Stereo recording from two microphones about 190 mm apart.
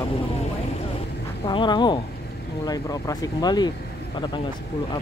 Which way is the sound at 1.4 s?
25° left (ahead or behind).